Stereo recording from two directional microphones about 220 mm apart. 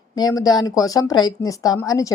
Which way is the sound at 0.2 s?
15° left (ahead or behind).